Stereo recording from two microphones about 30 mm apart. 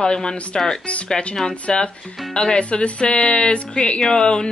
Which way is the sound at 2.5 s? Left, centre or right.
Left.